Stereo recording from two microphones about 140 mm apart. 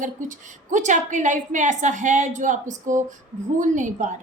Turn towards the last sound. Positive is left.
turn(degrees=-65)  # may be behind; listen again after turning